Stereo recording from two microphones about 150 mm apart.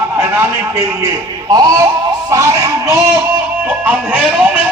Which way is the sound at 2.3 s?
20° right (ahead or behind).